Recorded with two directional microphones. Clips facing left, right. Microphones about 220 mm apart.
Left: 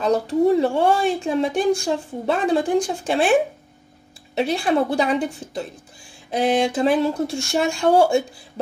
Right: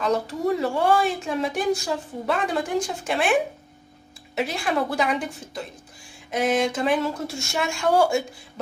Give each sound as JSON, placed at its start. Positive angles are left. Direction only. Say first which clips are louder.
{"t": 0.0, "sound": "speech", "louder": "left 6 dB", "side_deg": 30}
{"t": 4.4, "sound": "speech", "louder": "left 5 dB", "side_deg": 30}